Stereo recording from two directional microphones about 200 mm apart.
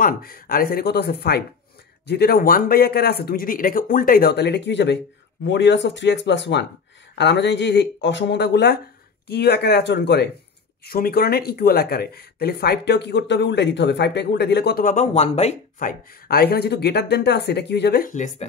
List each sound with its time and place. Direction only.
0.0 s speech: 50° left (ahead or behind)